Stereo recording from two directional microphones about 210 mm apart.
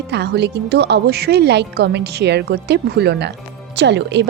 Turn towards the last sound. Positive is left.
turn(degrees=-55)  # may be behind; listen again after turning